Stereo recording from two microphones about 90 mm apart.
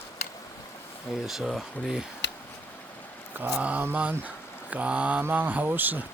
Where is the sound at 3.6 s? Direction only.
20° right (ahead or behind).